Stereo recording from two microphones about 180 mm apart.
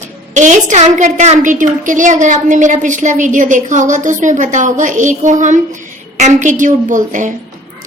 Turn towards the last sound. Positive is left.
turn(degrees=-45)  # may be behind; listen again after turning